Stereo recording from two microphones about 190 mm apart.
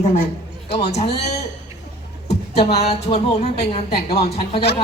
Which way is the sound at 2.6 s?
35° left (ahead or behind).